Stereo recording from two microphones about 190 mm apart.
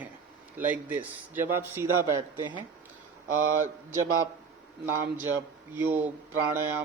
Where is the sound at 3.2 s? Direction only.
45° right (ahead or behind).